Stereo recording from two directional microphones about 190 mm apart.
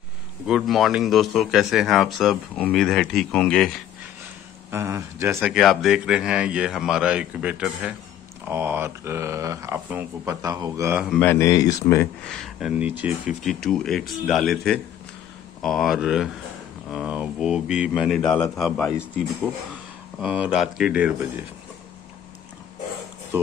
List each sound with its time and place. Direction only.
0.5 s speech: centre (ahead or behind)
4.6 s speech: 15° right (ahead or behind)
5.5 s speech: centre (ahead or behind); by 11.0 s 15° right (ahead or behind)
11.0 s speech: centre (ahead or behind)
11.2 s speech: 15° left (ahead or behind)
12.3 s speech: centre (ahead or behind)
18.9 s speech: 5° right (ahead or behind)
23.3 s speech: 10° right (ahead or behind)